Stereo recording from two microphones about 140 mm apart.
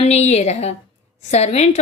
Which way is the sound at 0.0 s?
50° left (ahead or behind).